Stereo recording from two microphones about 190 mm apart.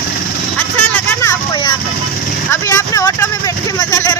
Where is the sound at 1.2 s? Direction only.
20° left (ahead or behind).